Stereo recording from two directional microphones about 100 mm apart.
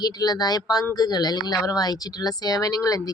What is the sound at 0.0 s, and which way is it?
Speech, 40° left (ahead or behind).